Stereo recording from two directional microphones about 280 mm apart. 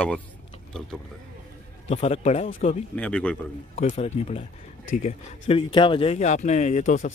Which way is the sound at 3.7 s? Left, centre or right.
Left.